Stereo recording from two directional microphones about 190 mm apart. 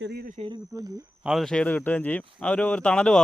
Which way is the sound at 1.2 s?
Centre (ahead or behind).